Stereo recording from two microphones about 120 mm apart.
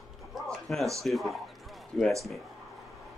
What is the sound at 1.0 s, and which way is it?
Speech, centre (ahead or behind).